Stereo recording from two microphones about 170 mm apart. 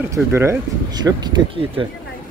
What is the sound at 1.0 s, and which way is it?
Speech, 25° right (ahead or behind).